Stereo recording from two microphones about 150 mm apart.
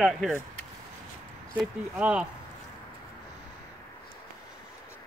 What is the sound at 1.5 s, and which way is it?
Speech, 10° right (ahead or behind).